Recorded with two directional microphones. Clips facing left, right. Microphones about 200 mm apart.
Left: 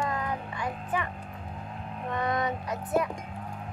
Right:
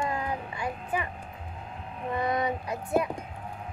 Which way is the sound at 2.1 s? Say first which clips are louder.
Right 1 dB; 10° right (ahead or behind).